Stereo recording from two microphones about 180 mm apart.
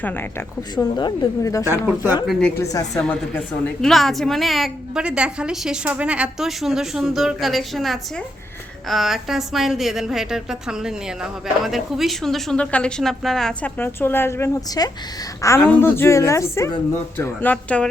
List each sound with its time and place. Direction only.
0.0 s speech: 10° left (ahead or behind)
0.9 s a woman's voice: 25° left (ahead or behind)
2.2 s a woman's voice: centre (ahead or behind)
2.6 s a woman's voice: 20° left (ahead or behind)